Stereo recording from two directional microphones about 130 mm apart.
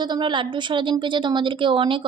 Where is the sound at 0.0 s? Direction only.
35° right (ahead or behind).